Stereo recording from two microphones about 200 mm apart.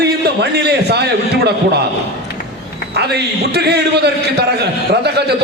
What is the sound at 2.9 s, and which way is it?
A man's voice, 55° right (ahead or behind).